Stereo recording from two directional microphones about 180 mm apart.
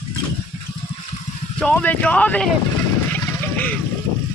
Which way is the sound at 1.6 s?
5° left (ahead or behind).